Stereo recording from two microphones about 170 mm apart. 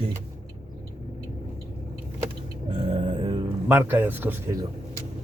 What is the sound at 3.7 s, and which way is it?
Speech, 10° right (ahead or behind).